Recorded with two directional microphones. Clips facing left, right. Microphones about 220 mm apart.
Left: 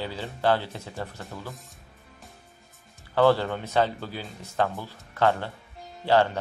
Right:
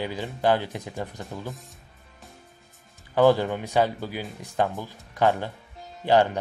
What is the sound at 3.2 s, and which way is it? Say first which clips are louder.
Speech: right 2 dB; 15° right (ahead or behind).